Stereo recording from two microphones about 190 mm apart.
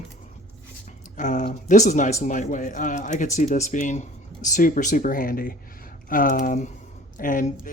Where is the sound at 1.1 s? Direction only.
40° left (ahead or behind).